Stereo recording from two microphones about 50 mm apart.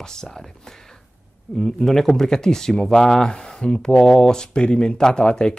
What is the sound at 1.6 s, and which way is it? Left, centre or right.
Speech, centre.